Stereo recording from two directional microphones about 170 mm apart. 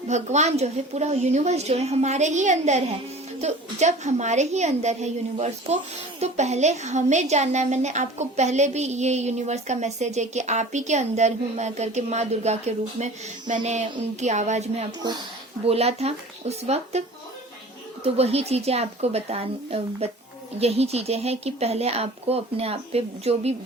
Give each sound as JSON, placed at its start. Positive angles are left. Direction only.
{"t": 0.1, "sound": "a woman's voice", "side_deg": -40}
{"t": 18.0, "sound": "a woman's voice", "side_deg": -35}